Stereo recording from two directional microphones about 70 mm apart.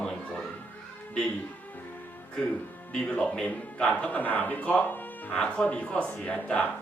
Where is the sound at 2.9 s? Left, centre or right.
Centre.